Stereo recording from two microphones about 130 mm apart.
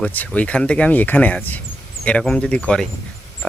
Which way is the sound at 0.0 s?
10° left (ahead or behind).